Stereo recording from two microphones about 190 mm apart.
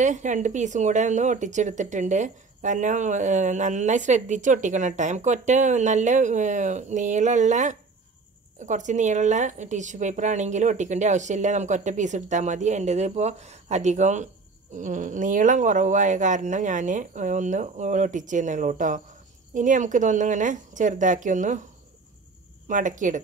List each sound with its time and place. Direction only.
0.0 s speech: 40° right (ahead or behind)
22.7 s speech: 40° right (ahead or behind)